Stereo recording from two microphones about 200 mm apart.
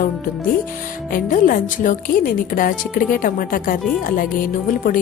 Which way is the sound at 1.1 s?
40° left (ahead or behind).